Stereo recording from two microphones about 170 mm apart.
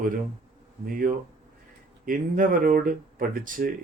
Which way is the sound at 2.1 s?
55° right (ahead or behind).